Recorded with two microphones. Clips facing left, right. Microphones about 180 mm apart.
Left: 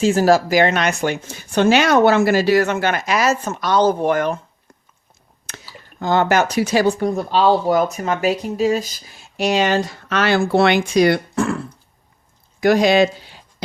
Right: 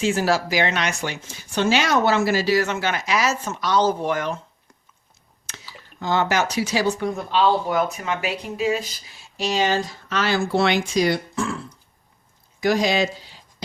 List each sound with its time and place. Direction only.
0.0 s speech: 40° left (ahead or behind)
5.5 s a sound: 55° left (ahead or behind)
6.0 s speech: 50° left (ahead or behind)